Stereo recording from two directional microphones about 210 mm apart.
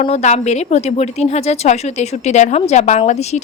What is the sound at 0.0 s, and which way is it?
A woman's voice, 35° left (ahead or behind).